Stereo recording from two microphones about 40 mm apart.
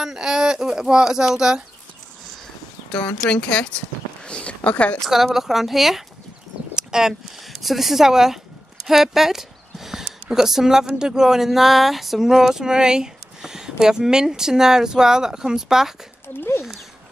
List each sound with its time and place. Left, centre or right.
0.0 s speech: centre
3.3 s a woman's voice: left
5.0 s speech: centre
6.7 s a sound: centre
7.4 s speech: centre
8.8 s clip-clop: centre
10.2 s speech: centre
16.3 s speech: left